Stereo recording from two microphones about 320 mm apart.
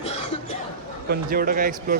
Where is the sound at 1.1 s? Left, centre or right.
Right.